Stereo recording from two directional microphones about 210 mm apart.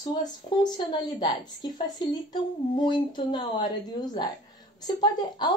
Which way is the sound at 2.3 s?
20° left (ahead or behind).